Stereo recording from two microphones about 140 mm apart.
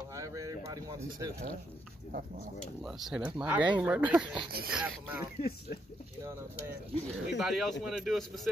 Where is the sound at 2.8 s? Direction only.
Centre (ahead or behind).